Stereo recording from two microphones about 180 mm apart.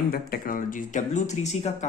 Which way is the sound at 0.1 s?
55° left (ahead or behind).